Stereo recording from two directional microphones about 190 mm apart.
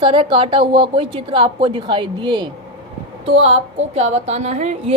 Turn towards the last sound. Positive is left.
turn(degrees=-35)  # may be behind; listen again after turning